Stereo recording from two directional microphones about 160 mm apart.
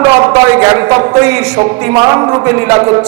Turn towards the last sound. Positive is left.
turn(degrees=-15)  # may be behind; listen again after turning